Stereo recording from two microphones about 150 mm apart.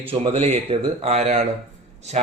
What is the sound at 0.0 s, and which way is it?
Speech, 40° right (ahead or behind).